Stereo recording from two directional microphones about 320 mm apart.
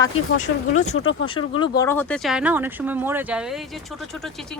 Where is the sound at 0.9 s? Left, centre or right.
Left.